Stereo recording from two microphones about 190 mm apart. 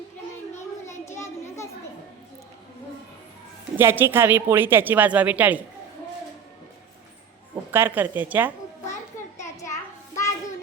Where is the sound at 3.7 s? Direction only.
10° right (ahead or behind).